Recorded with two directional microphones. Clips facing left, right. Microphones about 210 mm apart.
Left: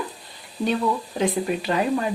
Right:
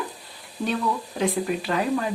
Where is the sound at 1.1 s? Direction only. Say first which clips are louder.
Left 1 dB; centre (ahead or behind).